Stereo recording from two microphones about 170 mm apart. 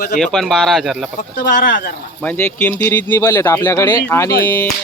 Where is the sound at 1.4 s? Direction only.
55° left (ahead or behind).